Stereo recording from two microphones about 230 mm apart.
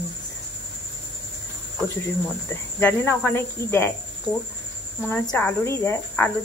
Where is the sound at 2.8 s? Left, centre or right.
Centre.